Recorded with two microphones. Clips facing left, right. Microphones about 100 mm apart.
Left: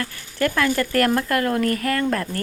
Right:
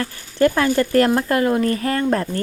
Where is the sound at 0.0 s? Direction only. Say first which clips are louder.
Right 6 dB; 25° right (ahead or behind).